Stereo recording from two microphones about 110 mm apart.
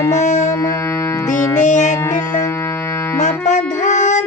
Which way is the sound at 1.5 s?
90° left.